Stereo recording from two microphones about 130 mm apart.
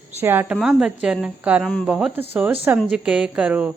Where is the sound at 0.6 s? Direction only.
5° right (ahead or behind).